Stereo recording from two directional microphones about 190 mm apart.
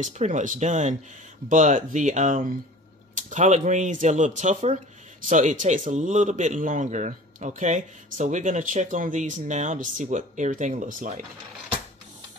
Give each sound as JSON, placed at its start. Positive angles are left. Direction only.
{"t": 0.0, "sound": "a man's voice", "side_deg": -40}